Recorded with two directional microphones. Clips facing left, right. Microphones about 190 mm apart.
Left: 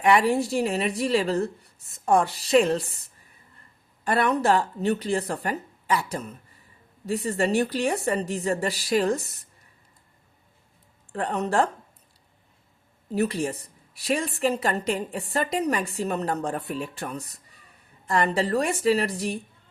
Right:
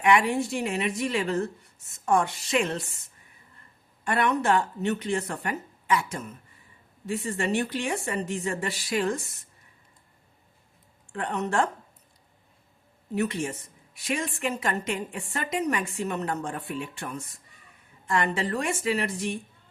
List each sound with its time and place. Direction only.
0.0 s a woman's voice: 35° left (ahead or behind)
11.1 s a woman's voice: 35° left (ahead or behind)
13.1 s a woman's voice: 35° left (ahead or behind)